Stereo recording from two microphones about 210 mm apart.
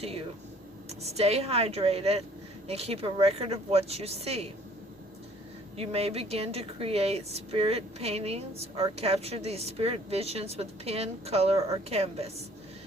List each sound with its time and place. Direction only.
0.0 s a woman's voice: 30° right (ahead or behind)
5.7 s a woman's voice: 30° right (ahead or behind)